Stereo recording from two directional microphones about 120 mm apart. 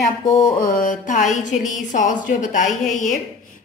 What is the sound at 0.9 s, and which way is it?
Speech, 90° left.